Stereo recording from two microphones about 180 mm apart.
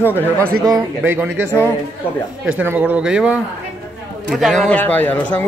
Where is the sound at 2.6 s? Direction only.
10° right (ahead or behind).